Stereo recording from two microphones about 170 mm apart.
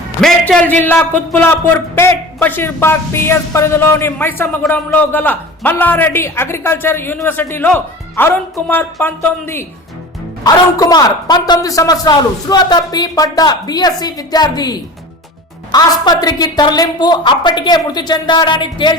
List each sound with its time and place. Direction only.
0.2 s a man's voice: 5° left (ahead or behind); by 18.9 s 25° left (ahead or behind)